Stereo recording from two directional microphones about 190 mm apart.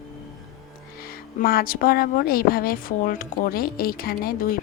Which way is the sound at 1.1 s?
50° left (ahead or behind).